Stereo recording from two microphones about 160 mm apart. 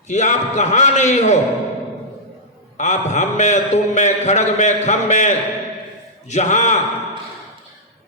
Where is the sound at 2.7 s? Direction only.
45° left (ahead or behind).